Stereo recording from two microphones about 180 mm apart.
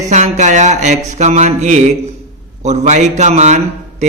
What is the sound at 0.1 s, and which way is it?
Speech, 40° right (ahead or behind).